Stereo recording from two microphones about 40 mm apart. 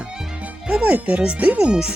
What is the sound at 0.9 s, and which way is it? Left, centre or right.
Speech, right.